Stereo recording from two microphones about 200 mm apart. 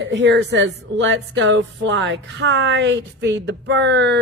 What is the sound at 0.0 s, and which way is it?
Speech, 65° right (ahead or behind).